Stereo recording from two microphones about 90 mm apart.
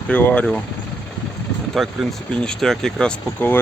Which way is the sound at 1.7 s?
Centre (ahead or behind).